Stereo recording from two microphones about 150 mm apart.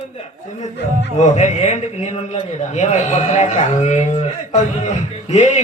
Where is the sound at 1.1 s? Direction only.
50° left (ahead or behind).